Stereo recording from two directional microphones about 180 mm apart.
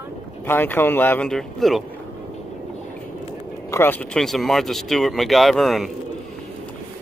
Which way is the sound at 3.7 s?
10° left (ahead or behind).